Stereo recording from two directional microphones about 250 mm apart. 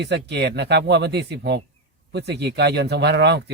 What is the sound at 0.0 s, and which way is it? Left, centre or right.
Speech, right.